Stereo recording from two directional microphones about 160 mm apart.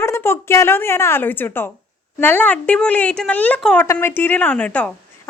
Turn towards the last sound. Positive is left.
turn(degrees=10)  # may be behind; listen again after turning